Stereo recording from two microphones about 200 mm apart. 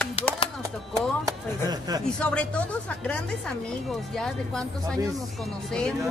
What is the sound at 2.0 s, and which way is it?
Speech, 5° left (ahead or behind).